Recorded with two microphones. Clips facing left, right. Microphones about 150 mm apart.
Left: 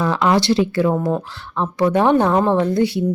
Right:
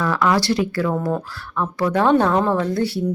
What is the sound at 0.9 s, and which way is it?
A woman's voice, 10° left (ahead or behind).